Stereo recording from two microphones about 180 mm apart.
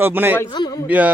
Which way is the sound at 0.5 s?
25° left (ahead or behind).